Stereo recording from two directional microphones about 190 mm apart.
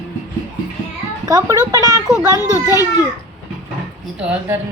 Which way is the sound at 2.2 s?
15° right (ahead or behind).